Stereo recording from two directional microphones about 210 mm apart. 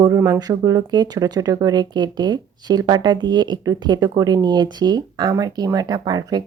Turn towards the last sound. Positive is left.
turn(degrees=-20)  # may be behind; listen again after turning